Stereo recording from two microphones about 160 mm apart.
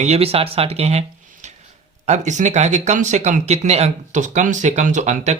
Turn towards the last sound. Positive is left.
turn(degrees=-45)  # may be behind; listen again after turning